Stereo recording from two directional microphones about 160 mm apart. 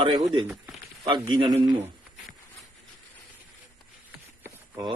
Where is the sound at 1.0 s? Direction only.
25° right (ahead or behind).